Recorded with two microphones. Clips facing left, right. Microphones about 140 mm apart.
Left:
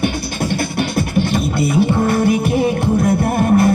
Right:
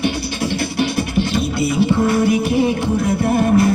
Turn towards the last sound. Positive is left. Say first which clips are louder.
# left 1 dB
turn(degrees=55)  # may be behind; listen again after turning